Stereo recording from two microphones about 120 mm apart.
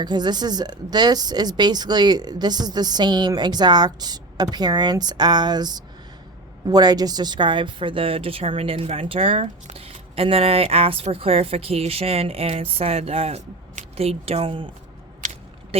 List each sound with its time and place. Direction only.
0.0 s a woman's voice: 35° right (ahead or behind)
15.7 s speech: 55° right (ahead or behind)